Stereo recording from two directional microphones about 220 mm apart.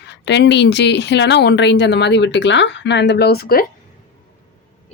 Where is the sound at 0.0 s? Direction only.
50° left (ahead or behind).